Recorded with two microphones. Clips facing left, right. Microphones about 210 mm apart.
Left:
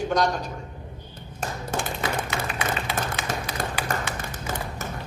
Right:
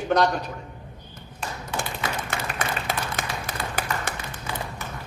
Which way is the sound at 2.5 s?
50° right (ahead or behind).